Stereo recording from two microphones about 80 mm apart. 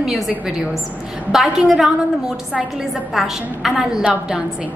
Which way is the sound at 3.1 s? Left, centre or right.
Centre.